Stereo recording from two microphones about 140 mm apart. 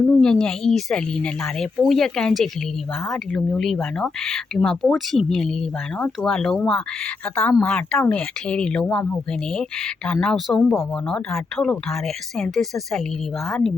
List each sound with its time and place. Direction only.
0.0 s speech: 10° left (ahead or behind)
10.1 s speech: 5° left (ahead or behind)